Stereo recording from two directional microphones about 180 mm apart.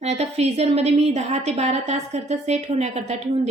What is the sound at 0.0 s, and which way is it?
A woman's voice, 35° right (ahead or behind).